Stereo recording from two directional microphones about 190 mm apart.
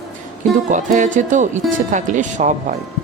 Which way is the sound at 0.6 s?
40° right (ahead or behind).